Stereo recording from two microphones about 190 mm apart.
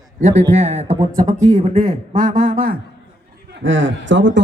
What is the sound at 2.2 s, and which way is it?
Speech, 45° right (ahead or behind).